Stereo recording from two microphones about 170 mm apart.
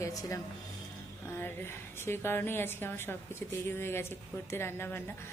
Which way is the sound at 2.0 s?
15° left (ahead or behind).